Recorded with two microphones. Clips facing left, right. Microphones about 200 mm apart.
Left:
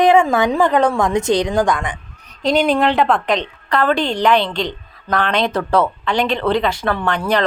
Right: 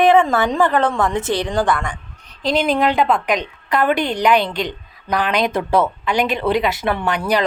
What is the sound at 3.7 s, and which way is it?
Speech, 20° right (ahead or behind).